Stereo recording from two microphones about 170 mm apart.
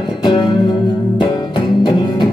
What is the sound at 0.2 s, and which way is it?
Music, 25° left (ahead or behind).